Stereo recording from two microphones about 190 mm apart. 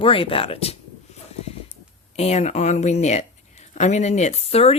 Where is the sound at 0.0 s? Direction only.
30° left (ahead or behind).